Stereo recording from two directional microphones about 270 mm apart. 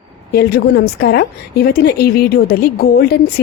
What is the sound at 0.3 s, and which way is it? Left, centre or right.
A woman's voice, left.